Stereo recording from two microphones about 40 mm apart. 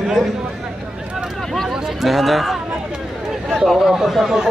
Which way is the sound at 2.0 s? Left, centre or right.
Centre.